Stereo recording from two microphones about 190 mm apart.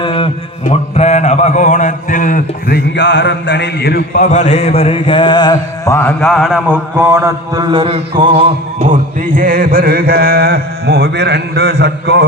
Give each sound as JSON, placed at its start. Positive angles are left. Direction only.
{"t": 0.0, "sound": "a sound", "side_deg": 25}
{"t": 0.6, "sound": "speech", "side_deg": 35}
{"t": 4.2, "sound": "mantra", "side_deg": 40}
{"t": 6.9, "sound": "mantra", "side_deg": -15}
{"t": 7.7, "sound": "mantra", "side_deg": -30}
{"t": 8.2, "sound": "music", "side_deg": -30}
{"t": 9.4, "sound": "mantra", "side_deg": -50}